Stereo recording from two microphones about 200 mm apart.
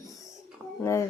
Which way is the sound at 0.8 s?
15° left (ahead or behind).